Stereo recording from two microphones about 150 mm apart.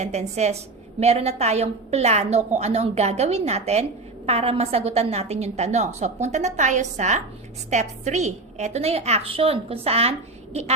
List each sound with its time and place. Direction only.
0.0 s a woman's voice: 50° right (ahead or behind)